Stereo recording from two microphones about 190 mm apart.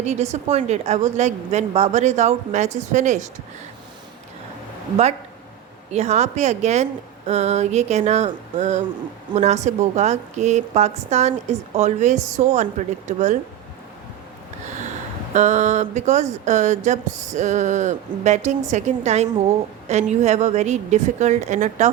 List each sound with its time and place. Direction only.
0.0 s a woman's voice: 35° right (ahead or behind)
5.9 s a woman's voice: 35° right (ahead or behind)
15.3 s a woman's voice: 40° right (ahead or behind)